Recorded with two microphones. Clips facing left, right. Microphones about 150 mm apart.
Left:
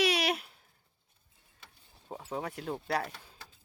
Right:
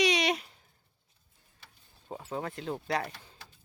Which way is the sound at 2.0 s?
Centre (ahead or behind).